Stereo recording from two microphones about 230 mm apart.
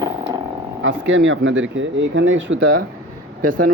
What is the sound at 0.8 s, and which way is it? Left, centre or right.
Speech, right.